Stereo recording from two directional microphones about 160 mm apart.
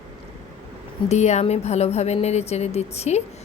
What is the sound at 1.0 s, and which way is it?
Speech, 45° left (ahead or behind).